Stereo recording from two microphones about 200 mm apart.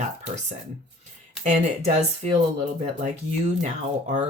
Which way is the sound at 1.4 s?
35° right (ahead or behind).